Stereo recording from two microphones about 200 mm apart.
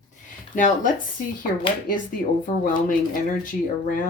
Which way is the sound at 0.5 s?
40° left (ahead or behind).